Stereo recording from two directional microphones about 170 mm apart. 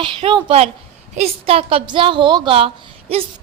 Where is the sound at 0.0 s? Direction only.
30° right (ahead or behind).